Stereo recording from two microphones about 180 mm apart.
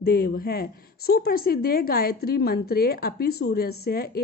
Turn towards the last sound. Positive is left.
turn(degrees=60)  # may be behind; listen again after turning